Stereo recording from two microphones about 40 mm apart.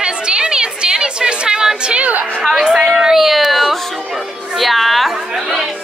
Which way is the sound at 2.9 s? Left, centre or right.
Centre.